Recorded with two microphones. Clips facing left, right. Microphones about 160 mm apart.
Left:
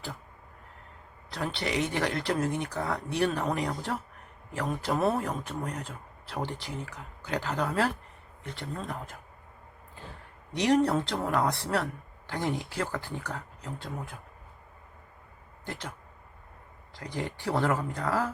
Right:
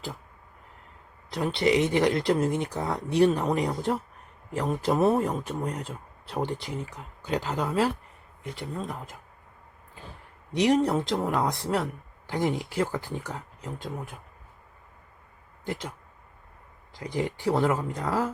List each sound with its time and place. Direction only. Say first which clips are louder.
1.3 s speech: right 8 dB; 20° right (ahead or behind)
10.5 s speech: right 2 dB; 15° right (ahead or behind)
15.6 s speech: right 5 dB; 15° right (ahead or behind)
17.0 s speech: right 5 dB; 15° right (ahead or behind)